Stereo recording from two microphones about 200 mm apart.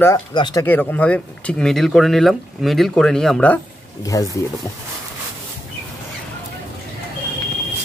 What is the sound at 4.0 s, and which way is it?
Speech, 15° left (ahead or behind).